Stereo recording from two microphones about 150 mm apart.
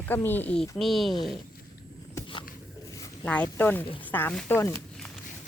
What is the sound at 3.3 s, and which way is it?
Speech, 10° left (ahead or behind).